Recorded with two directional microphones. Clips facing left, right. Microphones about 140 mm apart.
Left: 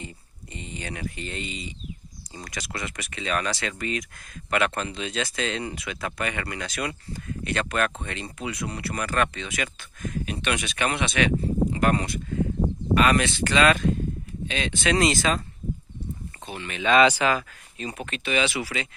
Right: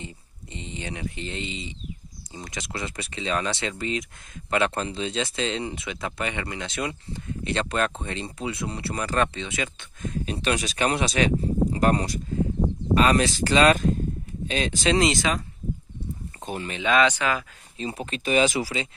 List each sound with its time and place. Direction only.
0.0 s a sound: 20° right (ahead or behind)
2.3 s speech: 20° right (ahead or behind); by 14.9 s 40° right (ahead or behind)
14.9 s speech: 20° right (ahead or behind)
16.4 s speech: 40° right (ahead or behind)
17.0 s speech: 5° left (ahead or behind)
17.7 s speech: 30° right (ahead or behind)